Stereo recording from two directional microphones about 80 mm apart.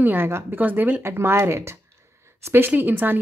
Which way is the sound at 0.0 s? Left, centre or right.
Right.